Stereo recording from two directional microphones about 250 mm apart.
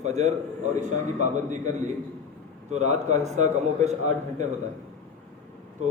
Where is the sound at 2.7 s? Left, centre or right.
Right.